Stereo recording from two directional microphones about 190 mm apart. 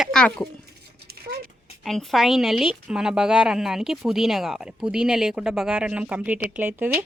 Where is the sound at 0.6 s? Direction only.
55° right (ahead or behind).